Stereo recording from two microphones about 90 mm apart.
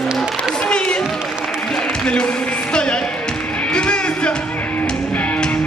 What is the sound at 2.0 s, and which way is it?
Speech, 10° left (ahead or behind).